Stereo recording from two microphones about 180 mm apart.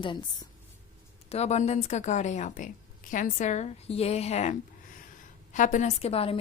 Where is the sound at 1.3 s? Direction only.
35° left (ahead or behind).